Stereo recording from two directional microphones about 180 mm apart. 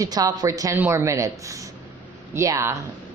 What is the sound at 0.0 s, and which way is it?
A woman's voice, 20° right (ahead or behind).